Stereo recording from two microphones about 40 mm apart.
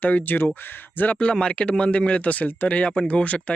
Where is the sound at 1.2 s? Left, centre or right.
Left.